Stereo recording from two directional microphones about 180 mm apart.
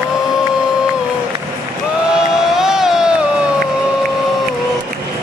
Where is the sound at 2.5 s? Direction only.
5° right (ahead or behind).